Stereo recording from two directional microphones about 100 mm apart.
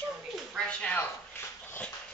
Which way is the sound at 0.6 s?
10° left (ahead or behind).